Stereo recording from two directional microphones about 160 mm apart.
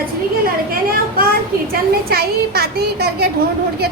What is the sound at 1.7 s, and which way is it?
Speech, 75° right (ahead or behind).